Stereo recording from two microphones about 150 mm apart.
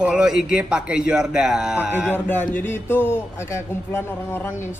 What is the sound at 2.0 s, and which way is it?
A man's voice, 15° left (ahead or behind).